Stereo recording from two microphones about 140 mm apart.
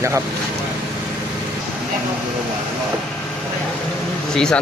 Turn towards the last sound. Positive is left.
turn(degrees=5)  # may be behind; listen again after turning